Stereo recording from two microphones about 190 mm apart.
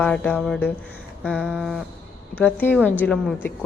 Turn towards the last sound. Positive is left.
turn(degrees=5)  # may be behind; listen again after turning